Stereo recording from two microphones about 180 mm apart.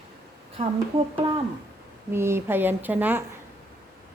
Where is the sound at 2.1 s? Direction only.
15° right (ahead or behind).